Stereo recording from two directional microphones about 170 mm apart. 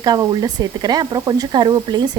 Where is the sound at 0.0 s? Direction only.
25° right (ahead or behind).